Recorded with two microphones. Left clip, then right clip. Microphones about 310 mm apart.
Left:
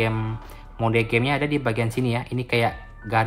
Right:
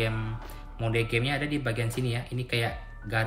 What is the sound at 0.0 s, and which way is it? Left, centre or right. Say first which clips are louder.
Speech: left 6 dB; centre.